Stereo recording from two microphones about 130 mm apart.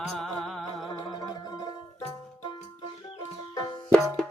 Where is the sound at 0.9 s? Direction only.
30° left (ahead or behind).